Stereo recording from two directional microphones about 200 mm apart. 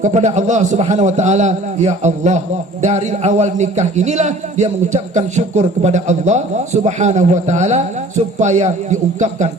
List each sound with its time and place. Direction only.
0.0 s a man's voice: 35° right (ahead or behind)